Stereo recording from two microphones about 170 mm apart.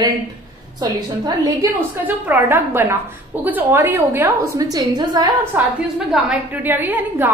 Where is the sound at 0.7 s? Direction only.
25° right (ahead or behind).